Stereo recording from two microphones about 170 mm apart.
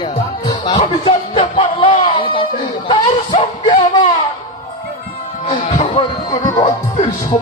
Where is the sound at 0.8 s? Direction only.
30° left (ahead or behind).